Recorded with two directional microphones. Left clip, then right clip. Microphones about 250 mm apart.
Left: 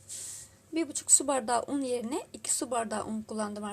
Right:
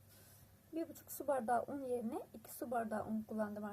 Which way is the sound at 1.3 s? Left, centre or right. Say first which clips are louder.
Left 8 dB; left.